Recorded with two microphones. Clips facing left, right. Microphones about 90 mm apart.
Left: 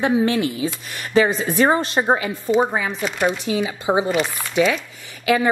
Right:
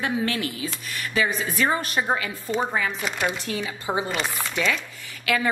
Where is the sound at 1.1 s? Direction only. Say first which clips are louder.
Left 8 dB; 35° left (ahead or behind); by 4.1 s 20° left (ahead or behind).